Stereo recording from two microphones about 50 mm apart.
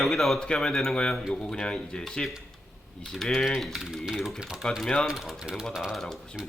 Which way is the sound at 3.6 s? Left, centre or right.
Centre.